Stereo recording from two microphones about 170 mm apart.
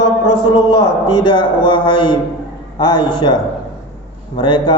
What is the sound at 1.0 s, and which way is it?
Mantra, 25° left (ahead or behind).